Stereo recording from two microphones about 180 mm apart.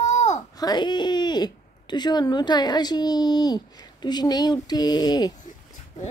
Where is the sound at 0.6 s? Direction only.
25° left (ahead or behind).